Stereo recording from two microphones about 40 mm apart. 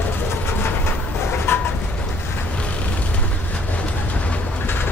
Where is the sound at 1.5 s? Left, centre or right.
Left.